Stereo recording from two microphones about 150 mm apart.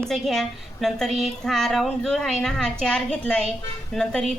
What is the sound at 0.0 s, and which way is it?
A woman's voice, centre (ahead or behind).